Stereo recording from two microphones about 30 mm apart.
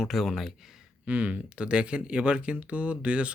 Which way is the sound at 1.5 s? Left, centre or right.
Right.